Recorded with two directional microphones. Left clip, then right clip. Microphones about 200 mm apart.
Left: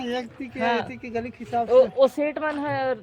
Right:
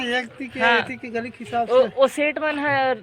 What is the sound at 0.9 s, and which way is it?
Speech, 40° right (ahead or behind).